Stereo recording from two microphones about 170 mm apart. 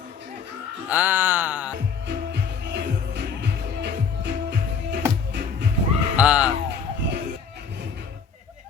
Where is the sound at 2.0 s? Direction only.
80° right.